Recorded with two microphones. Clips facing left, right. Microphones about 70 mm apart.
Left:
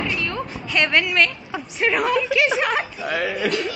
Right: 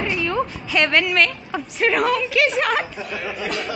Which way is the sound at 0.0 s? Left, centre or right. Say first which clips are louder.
Right 4 dB; centre.